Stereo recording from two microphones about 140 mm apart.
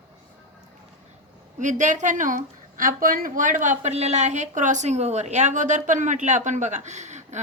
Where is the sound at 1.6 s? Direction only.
60° right (ahead or behind).